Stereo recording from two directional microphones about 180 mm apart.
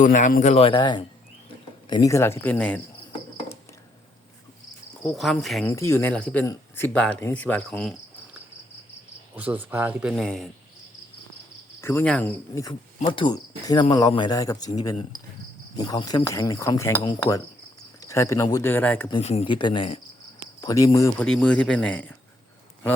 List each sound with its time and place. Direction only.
0.0 s speech: 45° left (ahead or behind); by 2.8 s 10° left (ahead or behind)
5.0 s cricket: centre (ahead or behind)
5.6 s speech: 15° left (ahead or behind)
9.3 s a man's voice: 10° right (ahead or behind)
11.8 s speech: 15° left (ahead or behind)
13.0 s cricket: 30° left (ahead or behind)
17.0 s speech: 20° left (ahead or behind)
19.2 s cricket: 35° left (ahead or behind)
20.6 s speech: 20° left (ahead or behind)
21.2 s speech: 5° left (ahead or behind)